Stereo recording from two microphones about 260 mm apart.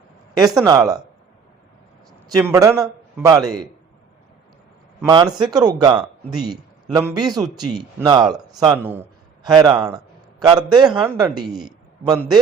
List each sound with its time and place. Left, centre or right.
0.6 s speech: centre
2.3 s speech: centre
5.0 s speech: centre
11.4 s a man's voice: centre
12.0 s speech: centre